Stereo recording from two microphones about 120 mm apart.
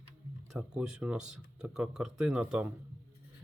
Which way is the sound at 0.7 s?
5° right (ahead or behind).